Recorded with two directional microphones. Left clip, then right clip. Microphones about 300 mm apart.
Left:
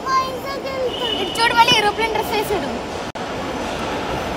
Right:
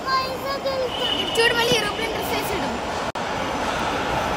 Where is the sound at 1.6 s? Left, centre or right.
Centre.